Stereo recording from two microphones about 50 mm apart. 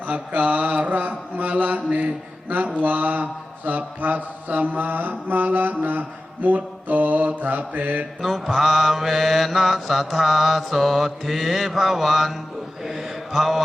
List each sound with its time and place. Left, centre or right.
0.1 s mantra: right
8.2 s mantra: centre